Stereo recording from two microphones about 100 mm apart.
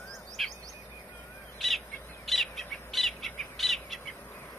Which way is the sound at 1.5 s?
Centre (ahead or behind).